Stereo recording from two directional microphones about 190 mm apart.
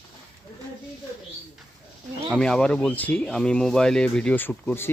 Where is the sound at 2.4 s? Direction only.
5° left (ahead or behind).